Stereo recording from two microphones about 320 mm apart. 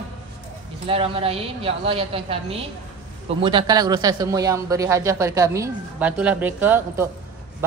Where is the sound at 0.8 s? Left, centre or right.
Centre.